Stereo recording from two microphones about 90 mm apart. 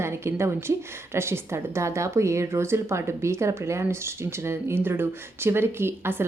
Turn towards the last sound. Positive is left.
turn(degrees=-25)  # may be behind; listen again after turning